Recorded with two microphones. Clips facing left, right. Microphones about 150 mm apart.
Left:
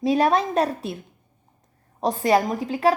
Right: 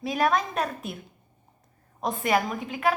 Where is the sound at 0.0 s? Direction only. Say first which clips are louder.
Left 5 dB; 30° left (ahead or behind).